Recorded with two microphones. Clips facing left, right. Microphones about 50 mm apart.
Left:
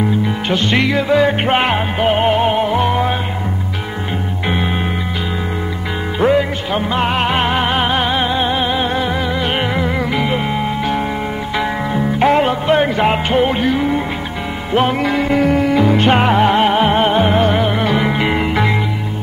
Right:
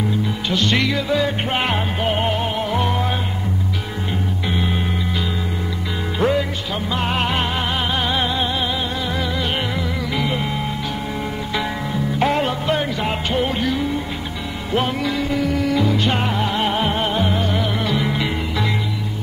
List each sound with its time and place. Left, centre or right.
0.5 s music: left
4.5 s music: left
6.1 s music: left